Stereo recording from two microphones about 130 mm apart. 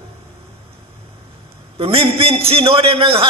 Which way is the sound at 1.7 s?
50° right (ahead or behind).